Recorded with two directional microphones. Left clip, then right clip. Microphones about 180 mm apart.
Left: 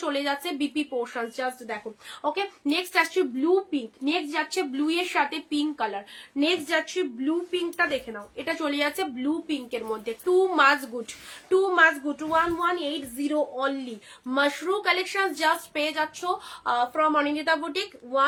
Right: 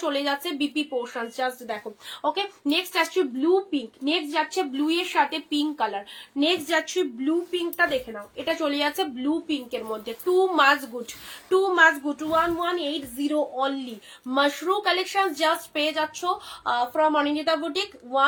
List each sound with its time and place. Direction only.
0.0 s a woman's voice: 15° left (ahead or behind)